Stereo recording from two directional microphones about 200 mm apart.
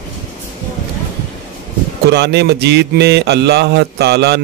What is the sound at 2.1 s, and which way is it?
Mantra, 55° right (ahead or behind).